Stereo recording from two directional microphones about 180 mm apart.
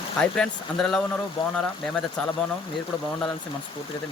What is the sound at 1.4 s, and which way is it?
Speech, 30° left (ahead or behind).